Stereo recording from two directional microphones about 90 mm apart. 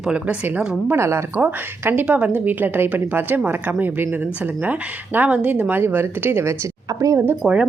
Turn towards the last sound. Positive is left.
turn(degrees=-15)  # may be behind; listen again after turning